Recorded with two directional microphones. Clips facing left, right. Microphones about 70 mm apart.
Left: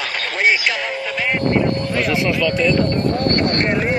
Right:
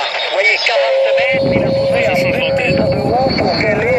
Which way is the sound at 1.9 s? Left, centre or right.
Centre.